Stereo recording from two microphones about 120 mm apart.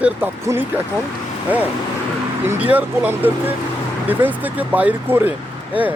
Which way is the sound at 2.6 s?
15° right (ahead or behind).